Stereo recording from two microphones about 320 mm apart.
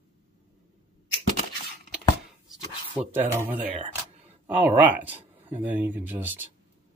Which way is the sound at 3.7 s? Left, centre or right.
Centre.